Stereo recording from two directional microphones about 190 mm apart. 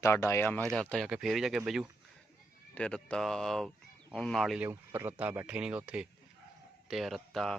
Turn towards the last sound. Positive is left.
turn(degrees=0)  # may be behind; listen again after turning